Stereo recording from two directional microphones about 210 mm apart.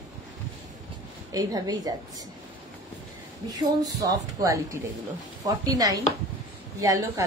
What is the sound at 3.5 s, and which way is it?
A woman's voice, 15° right (ahead or behind).